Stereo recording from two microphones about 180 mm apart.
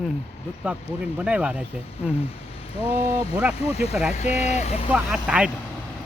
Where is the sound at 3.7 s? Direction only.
35° left (ahead or behind).